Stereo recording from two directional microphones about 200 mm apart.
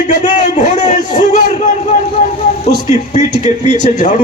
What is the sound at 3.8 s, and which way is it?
Speech, 40° left (ahead or behind).